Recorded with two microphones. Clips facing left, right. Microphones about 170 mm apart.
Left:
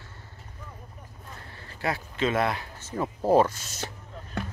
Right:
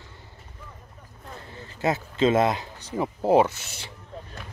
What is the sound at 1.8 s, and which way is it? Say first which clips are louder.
Speech: right 5 dB; 25° right (ahead or behind).